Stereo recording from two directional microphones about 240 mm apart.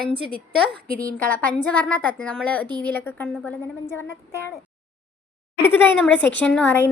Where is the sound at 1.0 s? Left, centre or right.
Centre.